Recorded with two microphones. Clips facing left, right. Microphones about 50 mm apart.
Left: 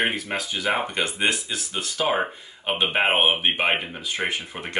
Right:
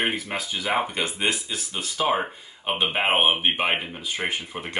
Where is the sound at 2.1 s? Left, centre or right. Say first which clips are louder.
Left 1 dB; centre.